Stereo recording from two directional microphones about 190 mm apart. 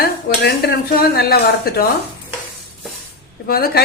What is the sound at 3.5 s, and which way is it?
Speech, 55° left (ahead or behind).